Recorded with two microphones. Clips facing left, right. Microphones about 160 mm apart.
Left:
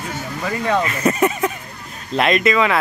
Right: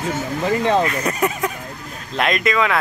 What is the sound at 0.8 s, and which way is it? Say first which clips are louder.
Speech: left 2 dB; centre (ahead or behind).